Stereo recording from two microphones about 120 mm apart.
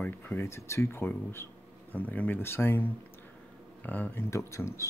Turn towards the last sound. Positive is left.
turn(degrees=20)  # may be behind; listen again after turning